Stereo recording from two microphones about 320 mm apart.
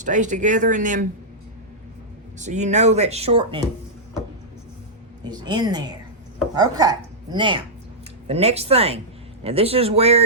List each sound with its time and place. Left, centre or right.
0.0 s speech: right
2.4 s speech: right
5.3 s a woman's voice: centre